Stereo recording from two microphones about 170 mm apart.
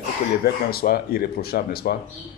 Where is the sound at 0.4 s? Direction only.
65° left (ahead or behind).